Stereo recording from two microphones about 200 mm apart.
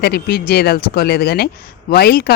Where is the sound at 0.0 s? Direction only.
50° left (ahead or behind).